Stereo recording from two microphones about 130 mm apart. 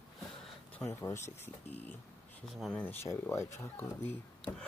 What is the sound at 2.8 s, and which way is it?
Speech, 15° left (ahead or behind).